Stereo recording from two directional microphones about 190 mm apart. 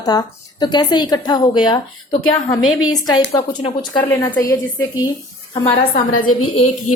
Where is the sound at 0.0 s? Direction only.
20° left (ahead or behind).